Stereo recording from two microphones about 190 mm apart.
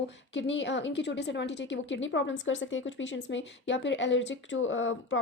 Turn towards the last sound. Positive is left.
turn(degrees=90)